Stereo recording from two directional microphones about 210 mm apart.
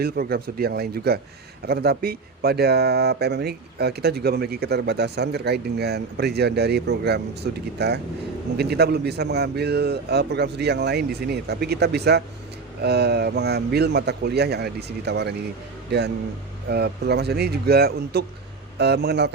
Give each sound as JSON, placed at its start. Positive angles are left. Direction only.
{"t": 0.0, "sound": "speech", "side_deg": -45}